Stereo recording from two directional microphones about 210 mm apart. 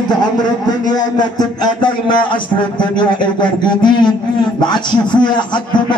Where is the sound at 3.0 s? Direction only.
20° left (ahead or behind).